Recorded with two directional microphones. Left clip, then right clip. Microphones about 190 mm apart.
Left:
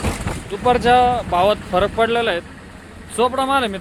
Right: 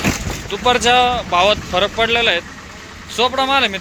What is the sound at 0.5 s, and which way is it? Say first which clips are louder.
Speech: right 1 dB; 25° left (ahead or behind).